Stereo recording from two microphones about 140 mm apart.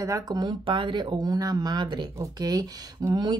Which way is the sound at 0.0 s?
25° right (ahead or behind).